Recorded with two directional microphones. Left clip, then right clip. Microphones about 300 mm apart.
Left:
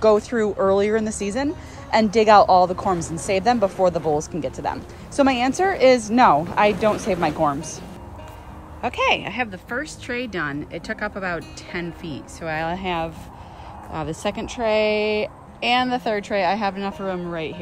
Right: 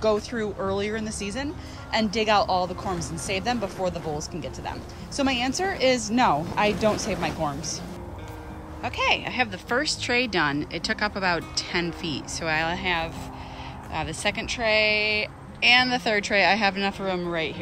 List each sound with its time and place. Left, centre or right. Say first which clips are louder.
0.0 s speech: left 7 dB; centre
8.8 s speech: left 4 dB; centre